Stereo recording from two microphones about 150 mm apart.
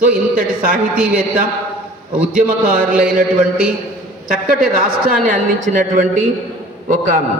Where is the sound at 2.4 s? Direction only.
65° right (ahead or behind).